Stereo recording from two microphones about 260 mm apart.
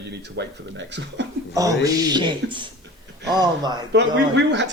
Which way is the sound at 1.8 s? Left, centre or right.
Centre.